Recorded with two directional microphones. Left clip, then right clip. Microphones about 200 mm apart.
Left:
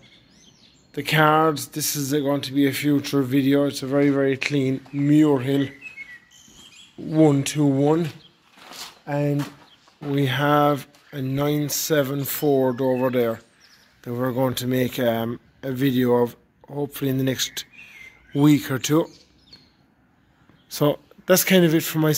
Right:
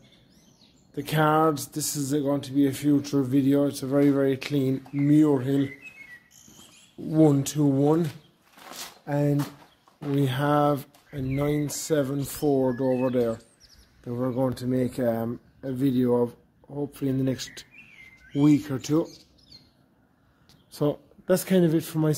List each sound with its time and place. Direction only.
0.9 s speech: 10° left (ahead or behind)
7.1 s speech: 5° left (ahead or behind); by 14.9 s 25° left (ahead or behind)
15.0 s speech: 15° left (ahead or behind)
20.7 s speech: 10° left (ahead or behind)